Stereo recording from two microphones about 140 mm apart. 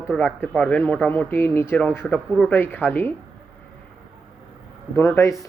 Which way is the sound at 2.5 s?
15° left (ahead or behind).